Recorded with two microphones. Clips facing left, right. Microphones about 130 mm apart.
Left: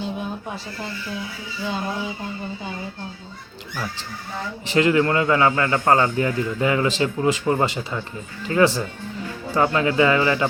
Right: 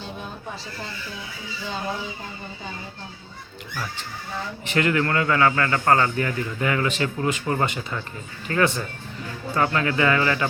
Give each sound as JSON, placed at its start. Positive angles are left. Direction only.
{"t": 4.7, "sound": "a man's voice", "side_deg": 25}